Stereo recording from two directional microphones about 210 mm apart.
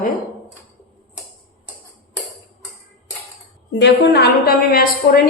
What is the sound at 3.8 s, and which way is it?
A woman's voice, 50° left (ahead or behind).